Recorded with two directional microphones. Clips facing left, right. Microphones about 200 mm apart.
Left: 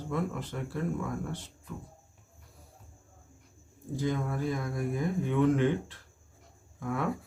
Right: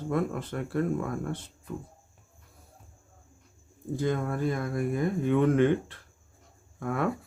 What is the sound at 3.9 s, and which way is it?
Speech, 55° right (ahead or behind).